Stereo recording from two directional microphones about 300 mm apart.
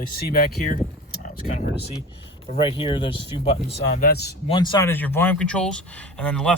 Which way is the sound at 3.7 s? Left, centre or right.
Left.